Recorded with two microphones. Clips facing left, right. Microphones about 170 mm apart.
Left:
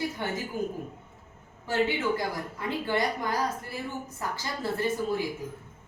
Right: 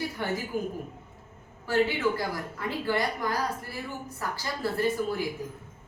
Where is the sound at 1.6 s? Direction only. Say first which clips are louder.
Right 1 dB; 20° left (ahead or behind).